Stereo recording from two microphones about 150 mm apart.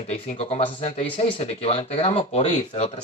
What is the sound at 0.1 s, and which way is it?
Speech, 45° left (ahead or behind).